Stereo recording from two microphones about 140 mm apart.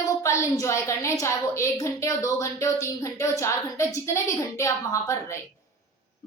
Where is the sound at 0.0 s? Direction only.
20° left (ahead or behind).